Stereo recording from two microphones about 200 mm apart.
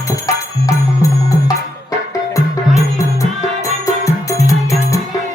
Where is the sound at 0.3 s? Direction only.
15° left (ahead or behind).